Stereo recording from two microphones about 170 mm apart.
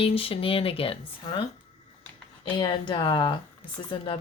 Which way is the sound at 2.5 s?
25° left (ahead or behind).